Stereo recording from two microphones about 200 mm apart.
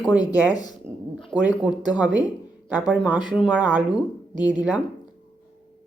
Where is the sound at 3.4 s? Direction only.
5° right (ahead or behind).